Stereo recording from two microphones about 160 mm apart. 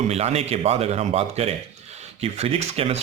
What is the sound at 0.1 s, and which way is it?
Speech, 40° right (ahead or behind).